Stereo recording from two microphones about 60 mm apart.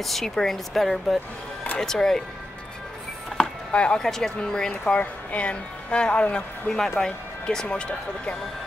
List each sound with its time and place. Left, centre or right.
0.0 s speech: centre
3.3 s chopping: centre
4.4 s speech: centre